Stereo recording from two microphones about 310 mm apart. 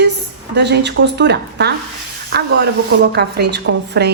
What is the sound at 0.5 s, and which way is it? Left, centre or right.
A woman's voice, right.